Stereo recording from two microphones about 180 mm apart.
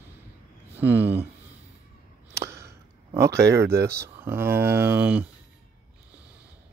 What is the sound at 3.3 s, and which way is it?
Speech, 65° right (ahead or behind).